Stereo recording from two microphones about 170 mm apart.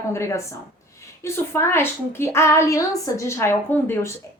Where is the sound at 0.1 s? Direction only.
15° left (ahead or behind).